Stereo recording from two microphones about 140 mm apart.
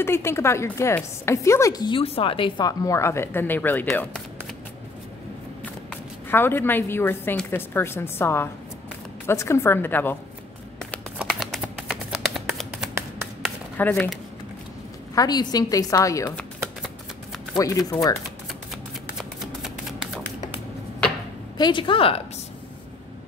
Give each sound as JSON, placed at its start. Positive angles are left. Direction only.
{"t": 0.0, "sound": "a woman's voice", "side_deg": 20}
{"t": 5.9, "sound": "a woman's voice", "side_deg": 15}
{"t": 11.1, "sound": "shuffling cards", "side_deg": 0}
{"t": 13.7, "sound": "speech", "side_deg": 10}
{"t": 15.1, "sound": "speech", "side_deg": 25}
{"t": 17.6, "sound": "speech", "side_deg": 25}
{"t": 19.1, "sound": "shuffling cards", "side_deg": -5}
{"t": 21.5, "sound": "a woman's voice", "side_deg": 30}